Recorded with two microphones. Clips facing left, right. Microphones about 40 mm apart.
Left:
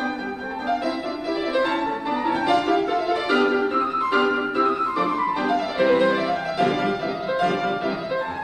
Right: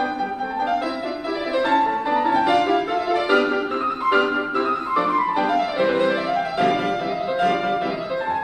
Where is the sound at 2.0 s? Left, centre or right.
Centre.